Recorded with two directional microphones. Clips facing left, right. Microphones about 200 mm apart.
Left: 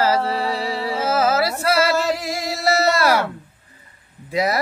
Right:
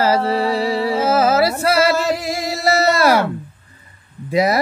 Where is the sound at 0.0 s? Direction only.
15° right (ahead or behind).